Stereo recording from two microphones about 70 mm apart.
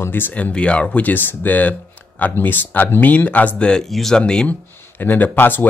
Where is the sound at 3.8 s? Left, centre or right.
Centre.